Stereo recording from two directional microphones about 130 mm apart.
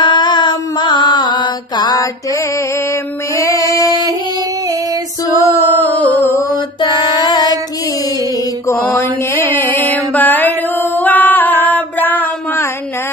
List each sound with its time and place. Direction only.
0.0 s mantra: 35° left (ahead or behind)
3.3 s music: 25° left (ahead or behind)
5.6 s music: 15° left (ahead or behind)
7.2 s child singing: 30° left (ahead or behind)
8.6 s mantra: 20° left (ahead or behind)